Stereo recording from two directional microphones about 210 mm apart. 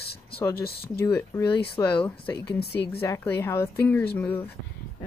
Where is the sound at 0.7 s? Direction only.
50° left (ahead or behind).